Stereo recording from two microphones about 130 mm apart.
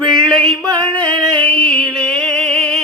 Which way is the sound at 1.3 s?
10° left (ahead or behind).